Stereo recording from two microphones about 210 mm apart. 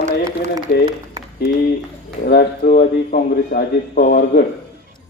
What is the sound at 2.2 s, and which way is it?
Speech, 45° left (ahead or behind).